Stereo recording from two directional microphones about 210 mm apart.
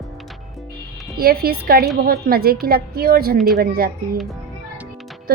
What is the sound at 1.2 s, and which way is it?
A woman's voice, 45° right (ahead or behind).